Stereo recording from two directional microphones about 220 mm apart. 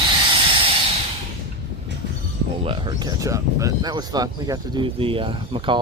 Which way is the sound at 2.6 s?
25° right (ahead or behind).